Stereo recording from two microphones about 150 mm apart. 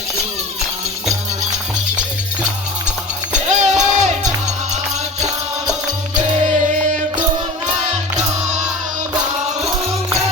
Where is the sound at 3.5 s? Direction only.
55° right (ahead or behind).